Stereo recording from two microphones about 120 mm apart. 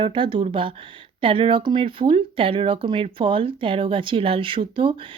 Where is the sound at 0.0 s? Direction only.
45° right (ahead or behind).